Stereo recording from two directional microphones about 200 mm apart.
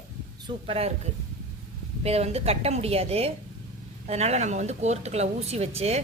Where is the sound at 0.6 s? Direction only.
30° right (ahead or behind).